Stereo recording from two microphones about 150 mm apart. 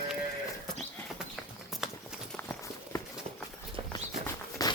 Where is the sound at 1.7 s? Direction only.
Centre (ahead or behind).